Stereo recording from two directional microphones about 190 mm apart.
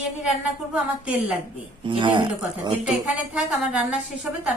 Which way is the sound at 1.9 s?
25° right (ahead or behind).